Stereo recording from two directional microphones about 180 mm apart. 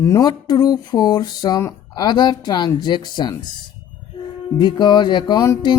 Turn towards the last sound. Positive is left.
turn(degrees=20)  # may be behind; listen again after turning